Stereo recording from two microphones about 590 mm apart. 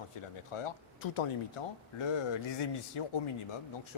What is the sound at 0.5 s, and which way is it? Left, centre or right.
Speech, left.